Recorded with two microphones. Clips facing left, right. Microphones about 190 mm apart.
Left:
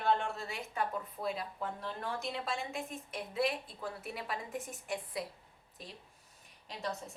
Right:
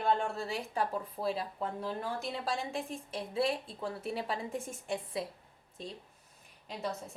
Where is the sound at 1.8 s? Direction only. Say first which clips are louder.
Right 2 dB; centre (ahead or behind).